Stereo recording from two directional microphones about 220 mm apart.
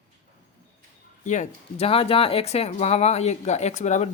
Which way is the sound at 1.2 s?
35° left (ahead or behind).